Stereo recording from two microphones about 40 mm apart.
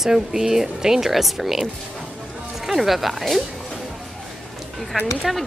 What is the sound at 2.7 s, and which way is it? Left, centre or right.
Speech, centre.